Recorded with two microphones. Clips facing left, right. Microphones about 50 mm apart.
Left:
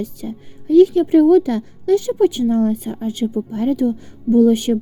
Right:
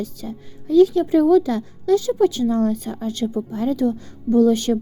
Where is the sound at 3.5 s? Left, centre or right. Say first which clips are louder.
Left 3 dB; left.